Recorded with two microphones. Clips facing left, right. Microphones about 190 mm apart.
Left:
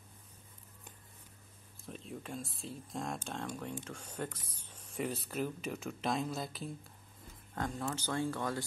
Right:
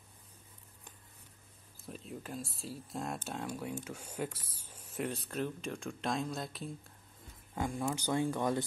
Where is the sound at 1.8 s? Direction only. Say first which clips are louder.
Even; centre (ahead or behind).